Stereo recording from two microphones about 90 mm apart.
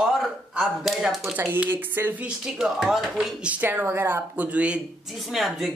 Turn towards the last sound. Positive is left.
turn(degrees=0)  # may be behind; listen again after turning